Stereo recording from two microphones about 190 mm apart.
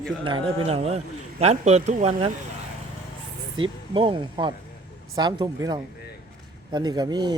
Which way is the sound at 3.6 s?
25° right (ahead or behind).